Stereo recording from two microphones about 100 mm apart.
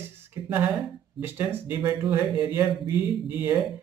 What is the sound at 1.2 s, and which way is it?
Speech, 20° right (ahead or behind).